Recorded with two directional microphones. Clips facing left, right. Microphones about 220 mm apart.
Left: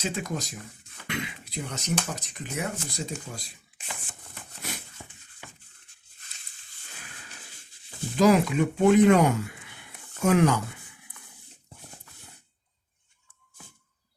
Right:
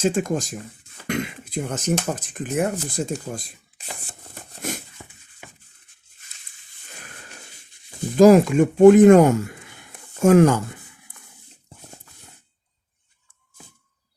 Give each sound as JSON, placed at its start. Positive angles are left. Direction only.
{"t": 0.0, "sound": "speech", "side_deg": -50}
{"t": 3.3, "sound": "shuffling cards", "side_deg": -45}
{"t": 8.1, "sound": "speech", "side_deg": -45}